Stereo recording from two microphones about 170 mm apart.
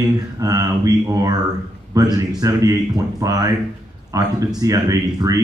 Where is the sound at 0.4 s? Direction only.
20° right (ahead or behind).